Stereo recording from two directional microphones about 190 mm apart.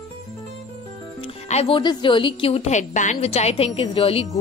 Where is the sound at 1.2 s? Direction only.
35° left (ahead or behind).